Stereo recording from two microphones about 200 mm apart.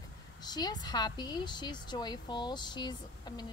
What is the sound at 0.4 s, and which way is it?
A woman's voice, 20° left (ahead or behind).